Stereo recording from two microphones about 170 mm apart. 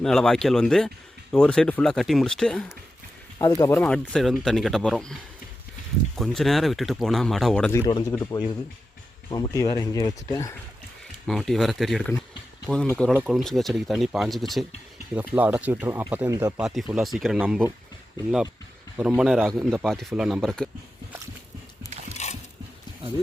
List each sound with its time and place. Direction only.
0.0 s speech: centre (ahead or behind)
3.3 s speech: 20° left (ahead or behind); by 5.1 s 5° left (ahead or behind)
6.1 s speech: centre (ahead or behind)
7.7 s speech: 20° left (ahead or behind)
11.3 s speech: centre (ahead or behind)
15.1 s speech: 10° right (ahead or behind)
16.6 s speech: centre (ahead or behind)
18.9 s speech: 5° right (ahead or behind)
22.2 s dog: 40° left (ahead or behind)